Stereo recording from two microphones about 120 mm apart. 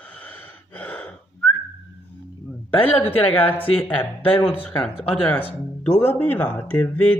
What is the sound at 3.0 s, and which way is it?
Speech, 15° left (ahead or behind).